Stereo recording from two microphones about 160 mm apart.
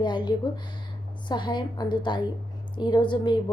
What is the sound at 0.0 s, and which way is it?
A woman's voice, 30° left (ahead or behind).